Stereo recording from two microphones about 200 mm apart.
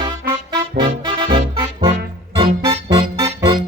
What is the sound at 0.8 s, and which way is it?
Music, 25° right (ahead or behind).